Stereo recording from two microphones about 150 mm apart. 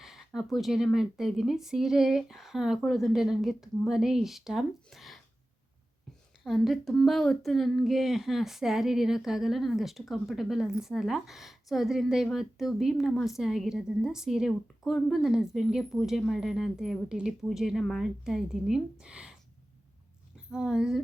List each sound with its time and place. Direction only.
0.0 s a sound: centre (ahead or behind)
0.3 s speech: centre (ahead or behind)
6.4 s speech: centre (ahead or behind)
20.5 s speech: 5° right (ahead or behind)